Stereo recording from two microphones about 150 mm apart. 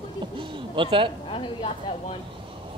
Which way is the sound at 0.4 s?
35° right (ahead or behind).